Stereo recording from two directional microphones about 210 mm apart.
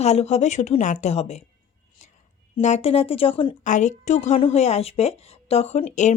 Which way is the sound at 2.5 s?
30° left (ahead or behind).